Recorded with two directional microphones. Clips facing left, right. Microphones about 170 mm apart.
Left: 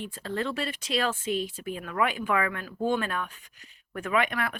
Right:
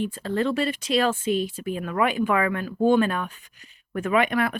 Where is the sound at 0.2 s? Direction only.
35° right (ahead or behind).